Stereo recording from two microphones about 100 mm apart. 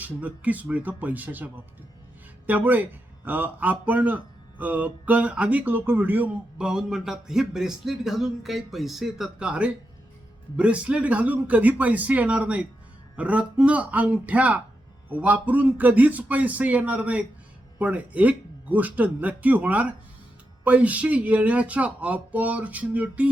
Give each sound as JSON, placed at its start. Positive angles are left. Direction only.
{"t": 0.0, "sound": "speech", "side_deg": -15}
{"t": 2.5, "sound": "speech", "side_deg": -15}
{"t": 6.6, "sound": "a man's voice", "side_deg": -5}